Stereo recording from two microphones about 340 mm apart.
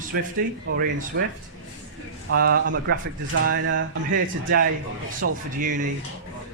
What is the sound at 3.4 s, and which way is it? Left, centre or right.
Music, right.